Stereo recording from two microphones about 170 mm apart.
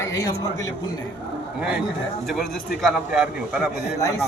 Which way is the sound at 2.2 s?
Centre (ahead or behind).